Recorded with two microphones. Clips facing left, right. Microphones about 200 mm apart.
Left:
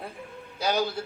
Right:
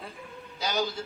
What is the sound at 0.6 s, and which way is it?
Speech, 60° left (ahead or behind).